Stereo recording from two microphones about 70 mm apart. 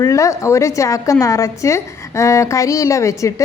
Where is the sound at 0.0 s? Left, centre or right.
Left.